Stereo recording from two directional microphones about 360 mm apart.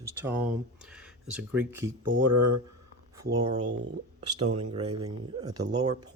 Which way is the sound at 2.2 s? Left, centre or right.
Right.